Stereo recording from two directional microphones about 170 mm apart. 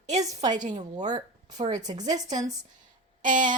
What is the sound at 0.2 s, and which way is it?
Speech, 20° right (ahead or behind).